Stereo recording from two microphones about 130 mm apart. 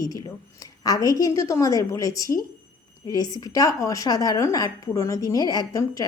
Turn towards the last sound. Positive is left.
turn(degrees=25)  # may be behind; listen again after turning